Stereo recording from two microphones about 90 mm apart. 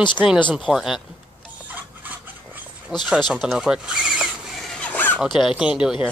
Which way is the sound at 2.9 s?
5° right (ahead or behind).